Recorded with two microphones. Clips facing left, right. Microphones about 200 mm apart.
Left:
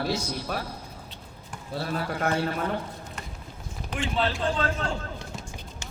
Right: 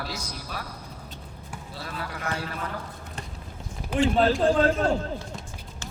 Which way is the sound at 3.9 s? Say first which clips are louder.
Right 7 dB; 40° right (ahead or behind).